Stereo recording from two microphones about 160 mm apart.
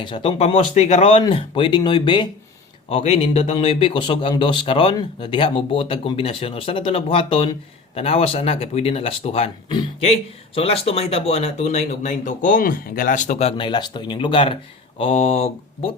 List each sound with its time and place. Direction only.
0.0 s speech: 35° left (ahead or behind)
1.2 s speech: 30° left (ahead or behind)
2.9 s speech: 40° left (ahead or behind)
13.6 s speech: 30° left (ahead or behind)